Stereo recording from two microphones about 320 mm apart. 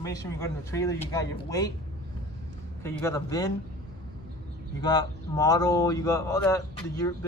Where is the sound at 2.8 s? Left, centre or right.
Centre.